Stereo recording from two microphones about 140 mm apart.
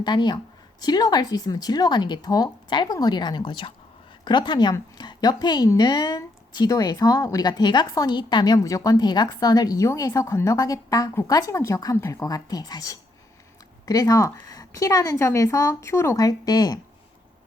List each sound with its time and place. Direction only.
0.0 s a woman's voice: 30° left (ahead or behind)